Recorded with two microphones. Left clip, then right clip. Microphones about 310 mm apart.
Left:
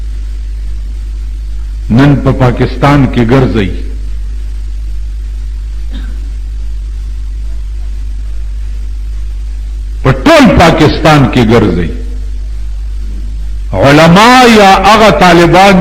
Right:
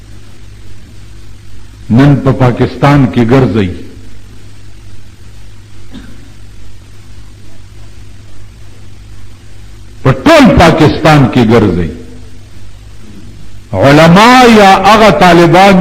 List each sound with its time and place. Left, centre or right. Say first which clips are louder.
2.0 s a man's voice: even; left
5.9 s a sound: left 1 dB; left
10.0 s a man's voice: even; left
13.7 s a man's voice: even; left